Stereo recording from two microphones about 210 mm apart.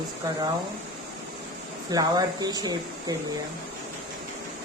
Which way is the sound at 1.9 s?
20° right (ahead or behind).